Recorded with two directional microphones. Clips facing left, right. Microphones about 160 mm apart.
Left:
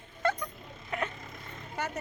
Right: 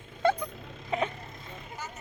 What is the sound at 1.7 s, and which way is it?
Vehicle, 65° left (ahead or behind).